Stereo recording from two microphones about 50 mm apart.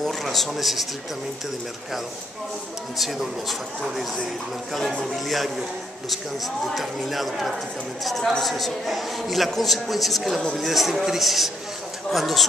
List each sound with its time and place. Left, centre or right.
0.0 s a man's voice: centre
3.0 s a man's voice: centre